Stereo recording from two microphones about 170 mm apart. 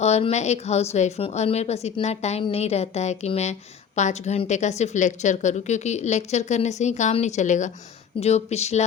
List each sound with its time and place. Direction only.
0.0 s a woman's voice: 40° left (ahead or behind)